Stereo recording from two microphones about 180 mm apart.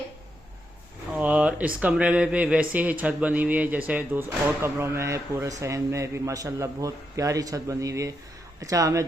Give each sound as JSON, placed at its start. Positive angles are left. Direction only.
{"t": 1.1, "sound": "speech", "side_deg": -5}